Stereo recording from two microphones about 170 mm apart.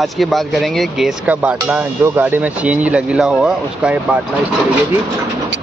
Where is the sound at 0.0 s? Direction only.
Centre (ahead or behind).